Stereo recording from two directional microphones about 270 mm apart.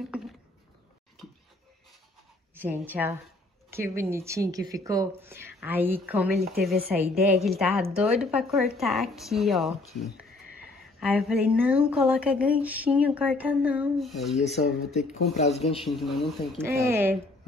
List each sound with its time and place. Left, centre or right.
0.1 s a sound: centre
2.5 s speech: centre
14.4 s speech: left
15.8 s speech: centre
16.5 s speech: centre